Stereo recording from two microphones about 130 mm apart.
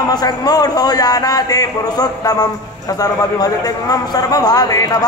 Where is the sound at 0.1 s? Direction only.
30° left (ahead or behind).